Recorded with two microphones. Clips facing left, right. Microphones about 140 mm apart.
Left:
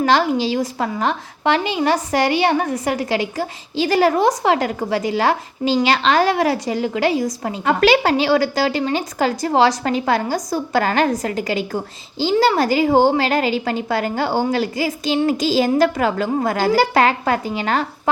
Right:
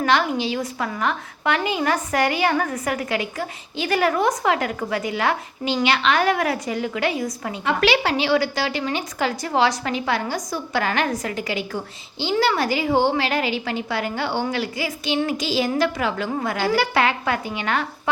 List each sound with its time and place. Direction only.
0.0 s a woman's voice: 35° left (ahead or behind)